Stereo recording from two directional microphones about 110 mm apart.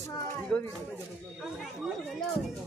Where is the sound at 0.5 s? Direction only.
5° left (ahead or behind).